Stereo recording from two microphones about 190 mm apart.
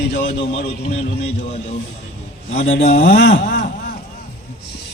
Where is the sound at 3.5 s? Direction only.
65° left (ahead or behind).